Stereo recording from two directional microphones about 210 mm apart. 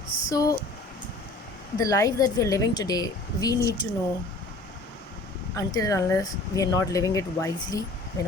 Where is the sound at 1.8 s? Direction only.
15° left (ahead or behind).